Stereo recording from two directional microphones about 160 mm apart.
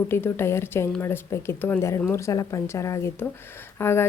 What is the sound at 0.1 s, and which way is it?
A woman's voice, 15° left (ahead or behind).